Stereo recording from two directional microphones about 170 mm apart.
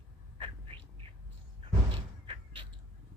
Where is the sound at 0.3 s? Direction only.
30° right (ahead or behind).